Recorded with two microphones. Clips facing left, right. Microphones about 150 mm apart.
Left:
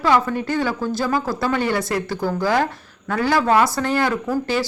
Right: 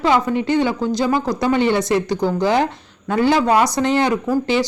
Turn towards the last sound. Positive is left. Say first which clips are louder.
# right 4 dB
turn(degrees=-20)  # may be behind; listen again after turning